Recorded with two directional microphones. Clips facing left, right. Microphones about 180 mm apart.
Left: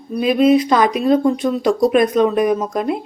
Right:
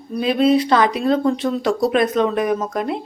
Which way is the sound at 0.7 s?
15° left (ahead or behind).